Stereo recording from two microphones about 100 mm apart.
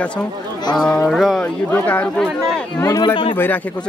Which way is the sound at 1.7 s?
15° left (ahead or behind).